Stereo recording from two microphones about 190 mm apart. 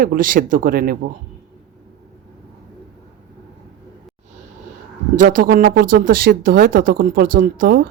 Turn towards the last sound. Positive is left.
turn(degrees=-50)  # may be behind; listen again after turning